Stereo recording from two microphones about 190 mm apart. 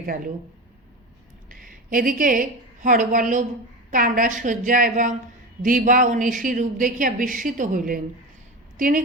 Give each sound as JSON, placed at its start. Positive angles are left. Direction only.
{"t": 0.0, "sound": "a woman's voice", "side_deg": -50}
{"t": 1.5, "sound": "a woman's voice", "side_deg": -45}